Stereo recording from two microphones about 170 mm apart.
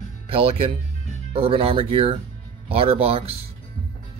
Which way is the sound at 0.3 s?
35° right (ahead or behind).